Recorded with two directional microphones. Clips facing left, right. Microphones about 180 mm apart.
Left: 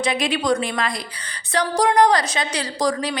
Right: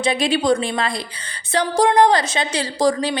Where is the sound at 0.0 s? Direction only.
30° right (ahead or behind).